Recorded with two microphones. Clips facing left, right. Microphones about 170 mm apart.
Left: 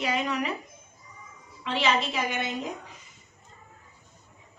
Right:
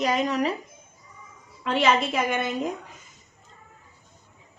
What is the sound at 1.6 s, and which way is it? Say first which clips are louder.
A woman's voice: right 4 dB; 50° right (ahead or behind).